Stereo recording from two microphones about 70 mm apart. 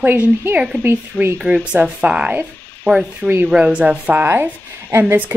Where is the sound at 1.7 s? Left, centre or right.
Centre.